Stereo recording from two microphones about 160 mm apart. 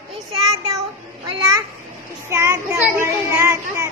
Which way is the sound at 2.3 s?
20° right (ahead or behind).